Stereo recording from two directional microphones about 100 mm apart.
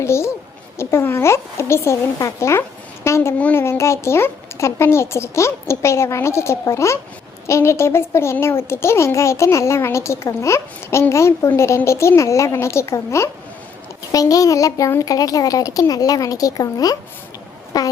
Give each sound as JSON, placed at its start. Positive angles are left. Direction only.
{"t": 0.0, "sound": "a child's voice", "side_deg": 25}
{"t": 3.3, "sound": "child singing", "side_deg": 15}
{"t": 3.6, "sound": "a child's voice", "side_deg": 25}